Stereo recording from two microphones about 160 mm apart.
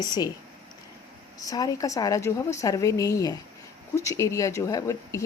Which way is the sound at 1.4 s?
20° left (ahead or behind).